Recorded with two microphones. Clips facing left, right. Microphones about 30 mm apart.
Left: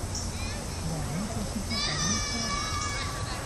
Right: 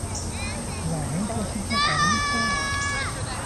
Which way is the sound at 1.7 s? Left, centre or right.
Right.